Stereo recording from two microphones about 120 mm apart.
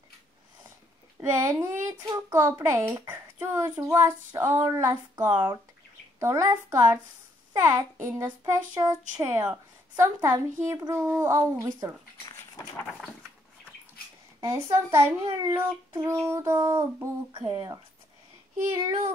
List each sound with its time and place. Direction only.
1.3 s a child's voice: 25° right (ahead or behind)
14.4 s a child's voice: 25° right (ahead or behind)